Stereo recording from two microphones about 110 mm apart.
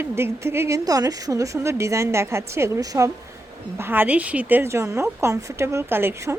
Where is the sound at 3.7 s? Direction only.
20° right (ahead or behind).